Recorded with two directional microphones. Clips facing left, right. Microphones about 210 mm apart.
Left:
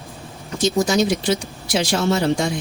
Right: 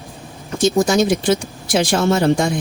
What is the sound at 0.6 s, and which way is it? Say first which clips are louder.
Speech: right 3 dB; 50° right (ahead or behind).